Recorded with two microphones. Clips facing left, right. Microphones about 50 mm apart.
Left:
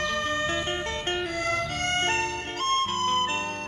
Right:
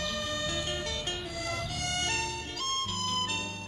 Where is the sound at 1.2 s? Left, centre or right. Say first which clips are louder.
Left 8 dB; left.